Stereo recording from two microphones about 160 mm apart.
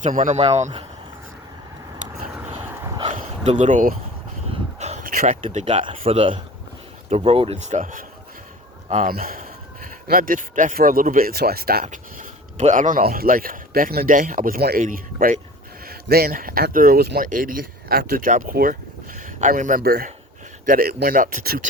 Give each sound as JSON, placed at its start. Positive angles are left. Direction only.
{"t": 0.0, "sound": "speech", "side_deg": -50}
{"t": 3.2, "sound": "a sound", "side_deg": -50}
{"t": 5.2, "sound": "speech", "side_deg": -45}
{"t": 15.9, "sound": "speech", "side_deg": -75}
{"t": 17.2, "sound": "speech", "side_deg": -55}